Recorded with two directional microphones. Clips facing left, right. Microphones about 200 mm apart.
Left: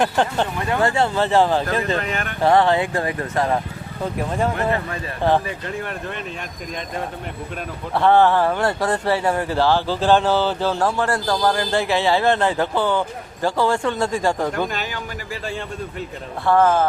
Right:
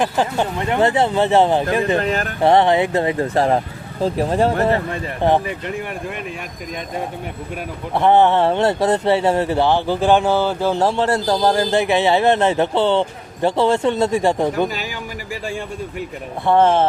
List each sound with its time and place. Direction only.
0.0 s speech: 5° right (ahead or behind)
0.6 s speech: 20° right (ahead or behind)
2.0 s speech: 35° right (ahead or behind)
2.4 s speech: 20° right (ahead or behind)
4.7 s speech: 20° right (ahead or behind)
7.9 s speech: 20° right (ahead or behind)
15.4 s speech: 10° right (ahead or behind)
16.5 s speech: 25° right (ahead or behind)